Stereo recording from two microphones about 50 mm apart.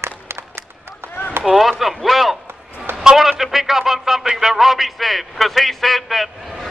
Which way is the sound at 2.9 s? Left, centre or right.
Centre.